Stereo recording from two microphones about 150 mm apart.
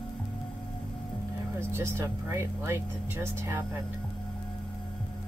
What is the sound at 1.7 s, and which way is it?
Speech, 15° right (ahead or behind).